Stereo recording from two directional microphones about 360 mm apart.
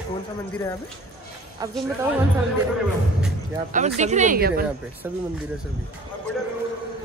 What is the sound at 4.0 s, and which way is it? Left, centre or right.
Speech, centre.